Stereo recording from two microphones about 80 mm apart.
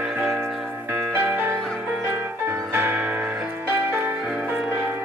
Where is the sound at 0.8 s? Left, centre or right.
Right.